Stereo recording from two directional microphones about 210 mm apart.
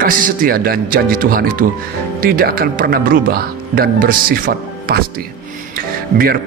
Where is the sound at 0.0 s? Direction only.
40° right (ahead or behind).